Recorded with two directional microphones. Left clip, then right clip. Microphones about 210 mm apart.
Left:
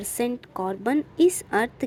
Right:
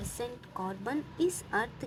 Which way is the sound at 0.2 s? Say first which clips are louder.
Left 11 dB; 30° left (ahead or behind).